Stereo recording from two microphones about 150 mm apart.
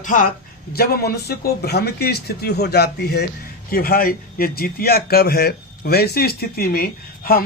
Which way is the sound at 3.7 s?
80° left.